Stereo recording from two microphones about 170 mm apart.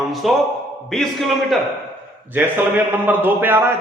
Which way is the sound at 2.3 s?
10° right (ahead or behind).